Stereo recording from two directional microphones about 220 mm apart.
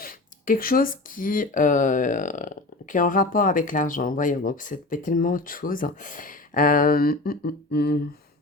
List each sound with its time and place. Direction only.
0.0 s speech: 40° left (ahead or behind)